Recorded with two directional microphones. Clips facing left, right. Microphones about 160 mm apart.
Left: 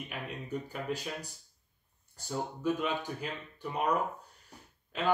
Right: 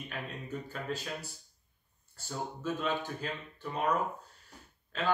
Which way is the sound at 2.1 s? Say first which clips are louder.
Left 3 dB; 15° left (ahead or behind).